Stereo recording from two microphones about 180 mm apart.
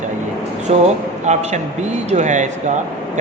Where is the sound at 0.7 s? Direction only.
40° right (ahead or behind).